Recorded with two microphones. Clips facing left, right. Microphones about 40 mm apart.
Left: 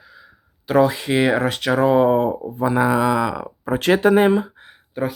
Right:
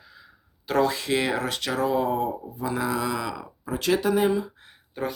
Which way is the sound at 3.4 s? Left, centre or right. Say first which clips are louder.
Left 7 dB; left.